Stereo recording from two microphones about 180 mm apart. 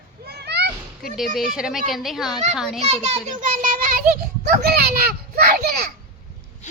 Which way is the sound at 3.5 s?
50° right (ahead or behind).